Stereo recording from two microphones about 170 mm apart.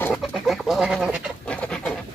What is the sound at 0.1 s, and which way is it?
Bird, centre (ahead or behind).